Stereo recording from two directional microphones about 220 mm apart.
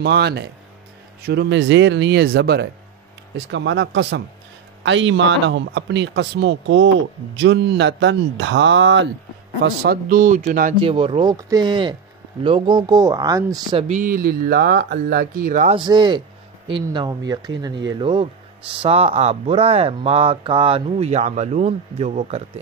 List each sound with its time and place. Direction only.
0.0 s a man's voice: 50° right (ahead or behind)
9.6 s speech: 45° right (ahead or behind)
10.8 s speech: 25° right (ahead or behind)
15.8 s speech: 20° right (ahead or behind)